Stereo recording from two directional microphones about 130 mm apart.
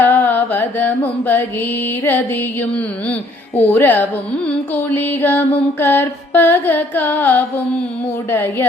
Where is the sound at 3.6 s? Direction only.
15° left (ahead or behind).